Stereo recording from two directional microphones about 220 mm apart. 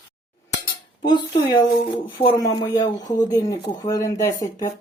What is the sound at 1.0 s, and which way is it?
Speech, 20° left (ahead or behind).